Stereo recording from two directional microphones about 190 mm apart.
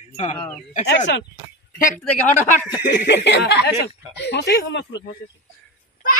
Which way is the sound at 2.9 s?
65° left (ahead or behind).